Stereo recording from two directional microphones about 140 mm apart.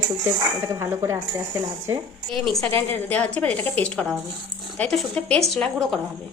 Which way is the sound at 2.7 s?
15° left (ahead or behind).